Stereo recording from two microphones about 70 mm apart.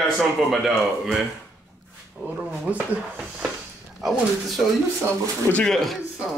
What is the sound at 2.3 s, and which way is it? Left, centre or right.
Speech, centre.